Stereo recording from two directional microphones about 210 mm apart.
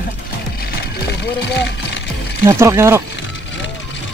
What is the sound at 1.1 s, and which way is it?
Music, 55° left (ahead or behind).